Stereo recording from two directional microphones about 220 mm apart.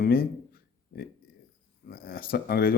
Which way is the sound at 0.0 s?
45° left (ahead or behind).